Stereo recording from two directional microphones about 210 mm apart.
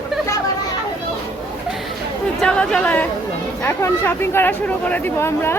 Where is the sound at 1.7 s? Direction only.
Centre (ahead or behind).